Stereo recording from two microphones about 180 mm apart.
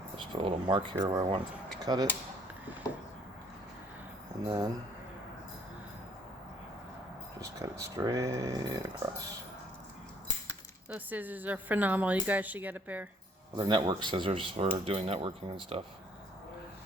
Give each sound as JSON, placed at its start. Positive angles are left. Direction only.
{"t": 0.3, "sound": "speech", "side_deg": -30}
{"t": 4.4, "sound": "speech", "side_deg": -20}
{"t": 7.4, "sound": "speech", "side_deg": -20}
{"t": 10.8, "sound": "speech", "side_deg": -10}
{"t": 13.6, "sound": "speech", "side_deg": -25}